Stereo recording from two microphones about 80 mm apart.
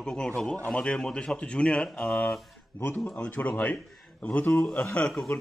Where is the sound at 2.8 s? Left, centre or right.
Centre.